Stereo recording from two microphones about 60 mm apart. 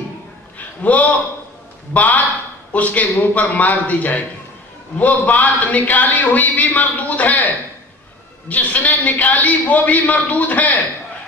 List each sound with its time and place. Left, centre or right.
0.6 s a sound: left
2.0 s a man's voice: left
8.5 s a man's voice: left